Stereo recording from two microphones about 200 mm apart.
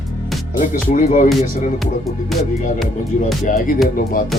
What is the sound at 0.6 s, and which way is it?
Speech, 40° left (ahead or behind).